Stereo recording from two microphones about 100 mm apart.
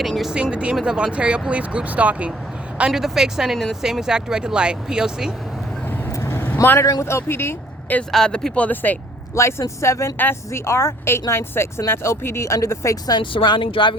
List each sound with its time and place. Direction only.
0.0 s speech: centre (ahead or behind)
6.1 s vehicle: 30° left (ahead or behind)
7.0 s speech: 25° left (ahead or behind)
8.1 s a woman's voice: 5° left (ahead or behind); by 13.0 s 30° left (ahead or behind)
13.1 s speech: 50° left (ahead or behind)